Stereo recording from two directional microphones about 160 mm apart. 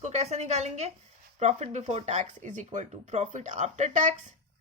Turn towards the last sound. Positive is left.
turn(degrees=-50)  # may be behind; listen again after turning